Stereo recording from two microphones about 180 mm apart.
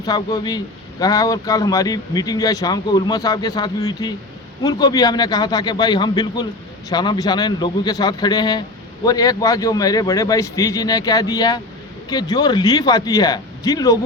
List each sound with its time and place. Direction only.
0.0 s speech: 20° left (ahead or behind)